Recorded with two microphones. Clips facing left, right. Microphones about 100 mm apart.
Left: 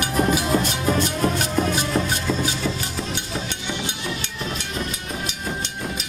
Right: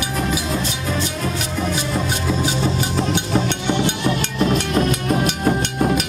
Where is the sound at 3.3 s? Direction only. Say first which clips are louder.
Right 9 dB; 60° right (ahead or behind).